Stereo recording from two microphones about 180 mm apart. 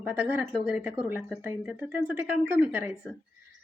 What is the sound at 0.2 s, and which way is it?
A woman's voice, 10° right (ahead or behind).